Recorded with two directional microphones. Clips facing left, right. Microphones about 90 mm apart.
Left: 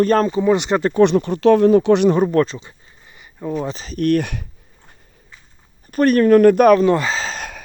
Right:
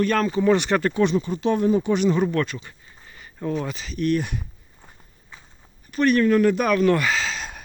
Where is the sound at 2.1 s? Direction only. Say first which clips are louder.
Left 6 dB; 35° left (ahead or behind).